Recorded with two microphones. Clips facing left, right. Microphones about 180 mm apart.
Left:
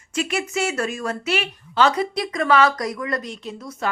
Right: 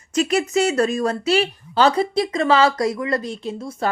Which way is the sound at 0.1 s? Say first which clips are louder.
Right 6 dB; 40° right (ahead or behind).